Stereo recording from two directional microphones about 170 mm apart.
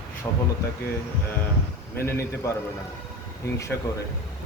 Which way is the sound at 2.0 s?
15° left (ahead or behind).